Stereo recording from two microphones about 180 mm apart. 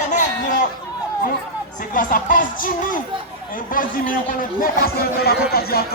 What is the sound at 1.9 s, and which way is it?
A man's voice, 50° left (ahead or behind).